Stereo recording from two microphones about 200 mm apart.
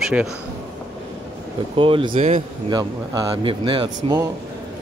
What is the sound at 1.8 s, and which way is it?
Speech, 25° right (ahead or behind).